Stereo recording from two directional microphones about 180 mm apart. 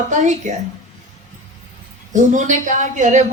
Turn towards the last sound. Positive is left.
turn(degrees=-40)  # may be behind; listen again after turning